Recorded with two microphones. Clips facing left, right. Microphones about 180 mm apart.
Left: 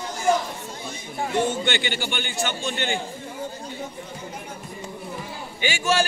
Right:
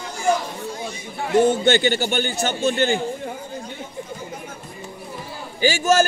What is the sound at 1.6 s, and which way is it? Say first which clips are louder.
A man's voice: right 8 dB; 40° right (ahead or behind).